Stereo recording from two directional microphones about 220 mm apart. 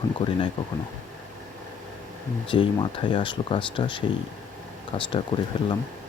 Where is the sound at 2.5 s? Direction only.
25° left (ahead or behind).